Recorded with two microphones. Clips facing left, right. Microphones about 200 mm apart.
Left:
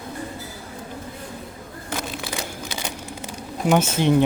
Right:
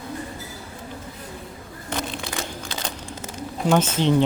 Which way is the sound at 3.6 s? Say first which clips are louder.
Left 1 dB; 10° left (ahead or behind).